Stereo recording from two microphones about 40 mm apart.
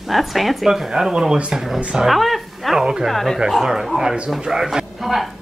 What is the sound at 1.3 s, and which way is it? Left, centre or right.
Speech, right.